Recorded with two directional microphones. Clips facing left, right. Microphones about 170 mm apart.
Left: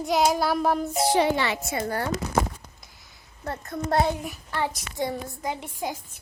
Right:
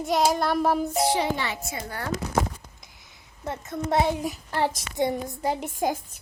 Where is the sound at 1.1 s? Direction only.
70° left (ahead or behind).